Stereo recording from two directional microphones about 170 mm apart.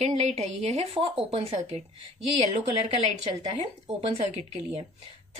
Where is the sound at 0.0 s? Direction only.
40° right (ahead or behind).